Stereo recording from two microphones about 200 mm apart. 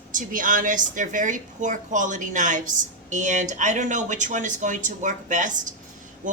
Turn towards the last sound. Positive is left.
turn(degrees=-40)  # may be behind; listen again after turning